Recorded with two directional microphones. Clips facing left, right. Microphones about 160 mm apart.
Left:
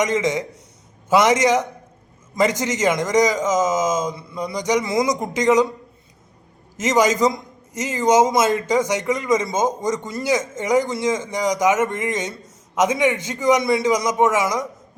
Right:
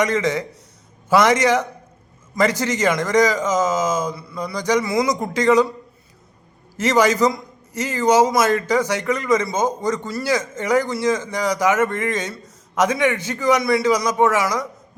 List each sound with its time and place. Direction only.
0.0 s a man's voice: 15° left (ahead or behind)
6.7 s a man's voice: 20° left (ahead or behind)